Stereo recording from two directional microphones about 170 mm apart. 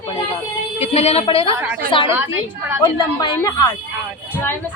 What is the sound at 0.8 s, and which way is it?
Speech, 35° left (ahead or behind).